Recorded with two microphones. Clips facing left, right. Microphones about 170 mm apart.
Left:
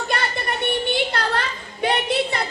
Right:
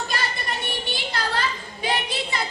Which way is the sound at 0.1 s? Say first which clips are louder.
Left 4 dB; 60° left (ahead or behind).